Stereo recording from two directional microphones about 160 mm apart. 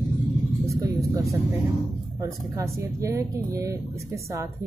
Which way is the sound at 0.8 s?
20° right (ahead or behind).